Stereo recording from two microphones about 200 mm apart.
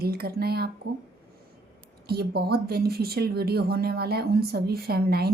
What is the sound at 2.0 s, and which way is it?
Speech, 50° right (ahead or behind).